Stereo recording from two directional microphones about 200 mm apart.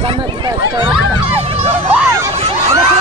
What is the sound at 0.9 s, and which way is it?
Crowd, 10° right (ahead or behind).